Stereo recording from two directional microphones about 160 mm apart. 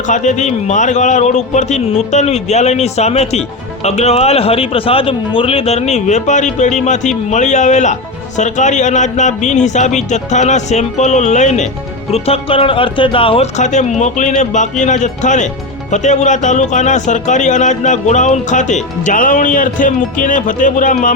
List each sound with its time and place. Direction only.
0.1 s speech: 50° left (ahead or behind)